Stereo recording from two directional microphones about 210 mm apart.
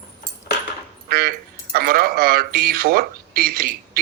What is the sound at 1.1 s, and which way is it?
Speech, 45° right (ahead or behind).